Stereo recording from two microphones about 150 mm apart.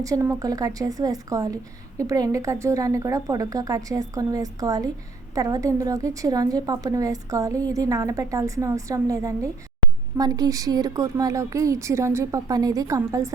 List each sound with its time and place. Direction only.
0.0 s a woman's voice: 20° right (ahead or behind)